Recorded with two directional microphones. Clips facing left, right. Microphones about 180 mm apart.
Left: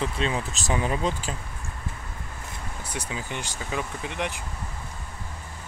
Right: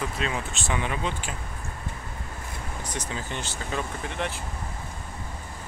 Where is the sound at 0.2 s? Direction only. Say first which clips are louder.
Left 2 dB; 35° left (ahead or behind).